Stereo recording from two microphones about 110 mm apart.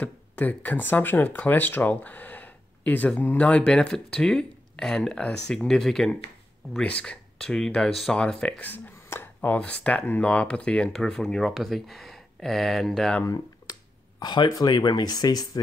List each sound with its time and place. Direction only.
0.0 s speech: 15° left (ahead or behind)
13.2 s a sound: 30° left (ahead or behind)
14.2 s speech: 40° left (ahead or behind)